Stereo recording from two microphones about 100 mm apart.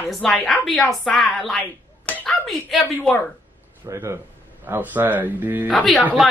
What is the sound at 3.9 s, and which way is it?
Speech, 30° right (ahead or behind).